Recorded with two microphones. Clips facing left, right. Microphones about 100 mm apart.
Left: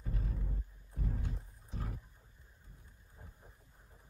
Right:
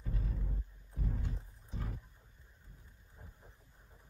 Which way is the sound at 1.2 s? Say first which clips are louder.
Even; centre (ahead or behind).